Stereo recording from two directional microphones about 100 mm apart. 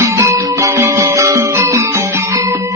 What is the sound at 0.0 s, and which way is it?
Music, 30° right (ahead or behind).